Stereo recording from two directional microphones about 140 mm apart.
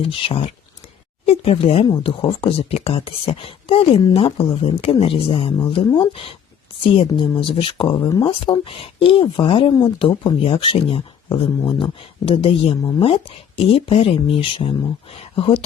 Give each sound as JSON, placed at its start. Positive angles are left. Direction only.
{"t": 0.0, "sound": "speech", "side_deg": 40}